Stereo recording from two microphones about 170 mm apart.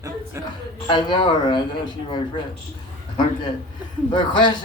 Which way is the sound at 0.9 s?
25° left (ahead or behind).